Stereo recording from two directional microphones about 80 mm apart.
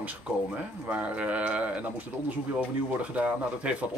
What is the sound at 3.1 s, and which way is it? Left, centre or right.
Speech, centre.